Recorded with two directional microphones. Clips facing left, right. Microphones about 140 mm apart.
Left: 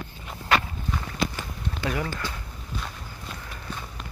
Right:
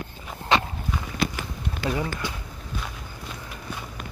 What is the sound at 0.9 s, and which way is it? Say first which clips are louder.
Walk: even; 10° right (ahead or behind).